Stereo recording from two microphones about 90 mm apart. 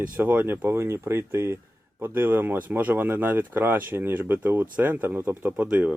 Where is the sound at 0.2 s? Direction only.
25° right (ahead or behind).